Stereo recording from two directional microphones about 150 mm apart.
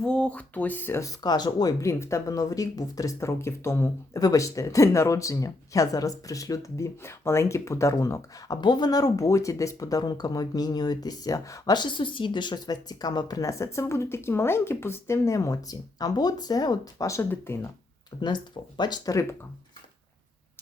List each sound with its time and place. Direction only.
0.0 s speech: 5° left (ahead or behind)
18.2 s speech: 30° left (ahead or behind)